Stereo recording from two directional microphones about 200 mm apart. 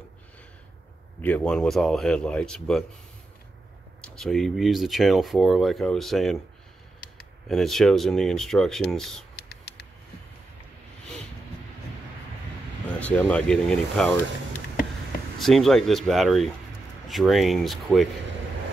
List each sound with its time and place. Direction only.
1.2 s speech: 5° left (ahead or behind)
4.0 s speech: 5° left (ahead or behind)
7.4 s speech: centre (ahead or behind)
9.3 s a sound: 55° left (ahead or behind)
13.0 s speech: 5° left (ahead or behind)
15.3 s speech: centre (ahead or behind)